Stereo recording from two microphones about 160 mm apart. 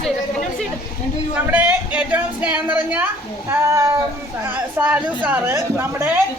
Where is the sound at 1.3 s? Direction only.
10° right (ahead or behind).